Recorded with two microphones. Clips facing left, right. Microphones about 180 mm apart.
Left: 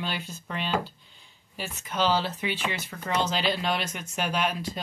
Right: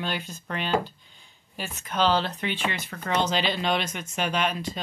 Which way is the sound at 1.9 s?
10° left (ahead or behind).